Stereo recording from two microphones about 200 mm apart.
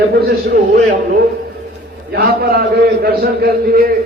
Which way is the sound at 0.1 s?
50° right (ahead or behind).